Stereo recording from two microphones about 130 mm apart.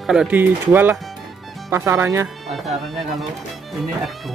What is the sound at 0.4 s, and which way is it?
Speech, 15° right (ahead or behind).